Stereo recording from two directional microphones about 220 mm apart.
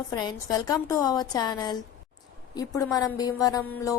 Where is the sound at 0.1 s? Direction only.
20° left (ahead or behind).